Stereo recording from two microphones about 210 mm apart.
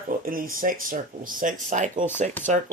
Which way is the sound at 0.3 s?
40° right (ahead or behind).